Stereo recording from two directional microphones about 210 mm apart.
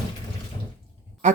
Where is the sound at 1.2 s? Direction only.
35° right (ahead or behind).